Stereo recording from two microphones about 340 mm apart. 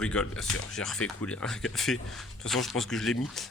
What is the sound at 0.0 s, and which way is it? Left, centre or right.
Speech, centre.